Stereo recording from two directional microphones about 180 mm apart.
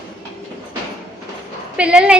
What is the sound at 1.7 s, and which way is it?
Speech, 5° right (ahead or behind).